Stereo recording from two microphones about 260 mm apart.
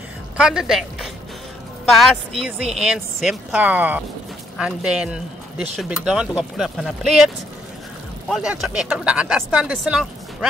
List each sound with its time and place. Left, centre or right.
0.4 s a woman's voice: centre
8.3 s a woman's voice: centre